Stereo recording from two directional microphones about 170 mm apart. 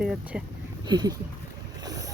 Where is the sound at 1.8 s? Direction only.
20° right (ahead or behind).